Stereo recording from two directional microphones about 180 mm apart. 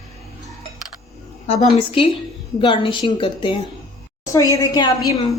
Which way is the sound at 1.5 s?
40° left (ahead or behind).